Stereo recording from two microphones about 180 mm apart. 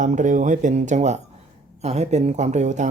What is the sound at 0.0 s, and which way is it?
Speech, 45° right (ahead or behind).